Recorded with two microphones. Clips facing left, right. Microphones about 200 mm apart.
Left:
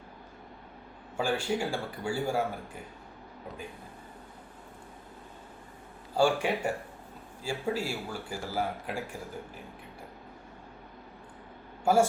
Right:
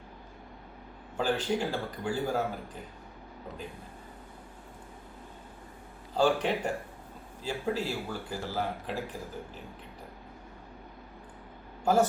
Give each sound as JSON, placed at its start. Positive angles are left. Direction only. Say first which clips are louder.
{"t": 1.1, "sound": "speech", "louder": "right 1 dB", "side_deg": 10}
{"t": 6.1, "sound": "speech", "louder": "even", "side_deg": 10}
{"t": 11.9, "sound": "speech", "louder": "left 1 dB", "side_deg": 10}